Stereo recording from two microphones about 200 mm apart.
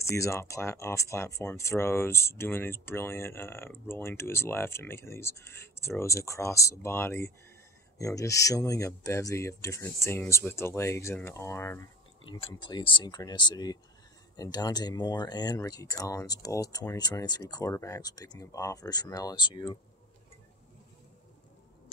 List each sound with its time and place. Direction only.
0.0 s speech: 15° left (ahead or behind)
12.3 s speech: 25° left (ahead or behind)